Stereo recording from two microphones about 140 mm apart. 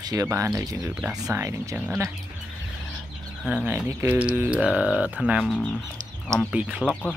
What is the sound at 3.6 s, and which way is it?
Speech, 15° right (ahead or behind).